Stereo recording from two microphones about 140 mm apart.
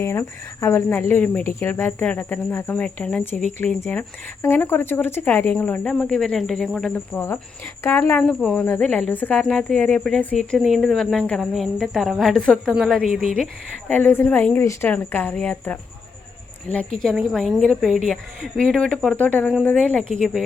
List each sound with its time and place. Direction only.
0.0 s speech: 20° left (ahead or behind)
6.9 s speech: 15° left (ahead or behind)
8.2 s a woman's voice: 5° left (ahead or behind)
17.0 s a woman's voice: 5° left (ahead or behind)